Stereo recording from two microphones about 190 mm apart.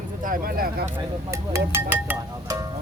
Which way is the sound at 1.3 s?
15° right (ahead or behind).